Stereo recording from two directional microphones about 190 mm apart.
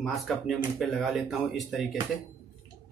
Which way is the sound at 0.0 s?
Centre (ahead or behind).